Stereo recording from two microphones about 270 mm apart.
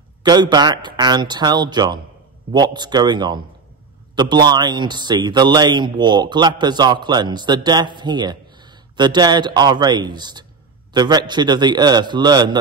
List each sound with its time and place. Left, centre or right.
0.2 s a man's voice: centre